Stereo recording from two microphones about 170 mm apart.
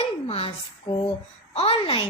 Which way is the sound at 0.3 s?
35° left (ahead or behind).